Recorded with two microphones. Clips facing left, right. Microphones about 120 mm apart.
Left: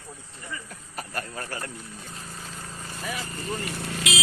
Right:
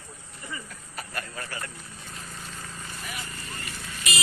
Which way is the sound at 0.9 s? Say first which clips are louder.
Left 3 dB; 40° left (ahead or behind).